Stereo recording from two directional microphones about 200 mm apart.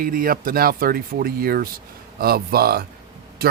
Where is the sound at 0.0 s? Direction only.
45° right (ahead or behind).